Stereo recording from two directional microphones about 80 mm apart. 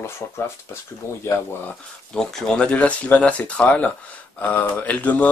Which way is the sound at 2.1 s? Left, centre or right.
Centre.